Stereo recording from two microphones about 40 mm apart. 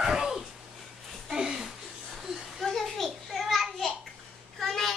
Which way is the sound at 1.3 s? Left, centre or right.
Centre.